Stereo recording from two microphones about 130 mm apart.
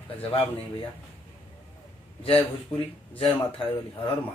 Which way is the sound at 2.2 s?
45° left (ahead or behind).